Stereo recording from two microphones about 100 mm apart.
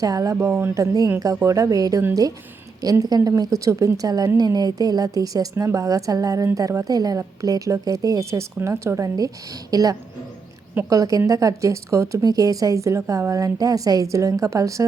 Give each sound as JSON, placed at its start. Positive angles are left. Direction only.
{"t": 0.0, "sound": "a woman's voice", "side_deg": -35}
{"t": 0.3, "sound": "a woman's voice", "side_deg": -25}